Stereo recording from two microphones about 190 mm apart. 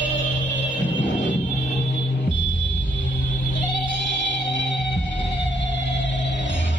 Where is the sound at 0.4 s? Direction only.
75° left (ahead or behind).